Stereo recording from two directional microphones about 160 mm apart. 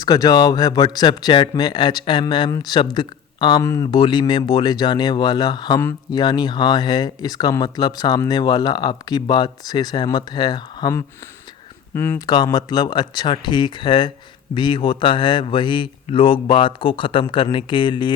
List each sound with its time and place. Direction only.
0.0 s speech: 20° left (ahead or behind)
11.9 s speech: 15° left (ahead or behind)
12.2 s a man's voice: 25° left (ahead or behind)